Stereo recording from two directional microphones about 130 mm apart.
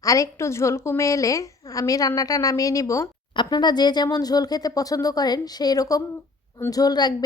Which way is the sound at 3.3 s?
35° left (ahead or behind).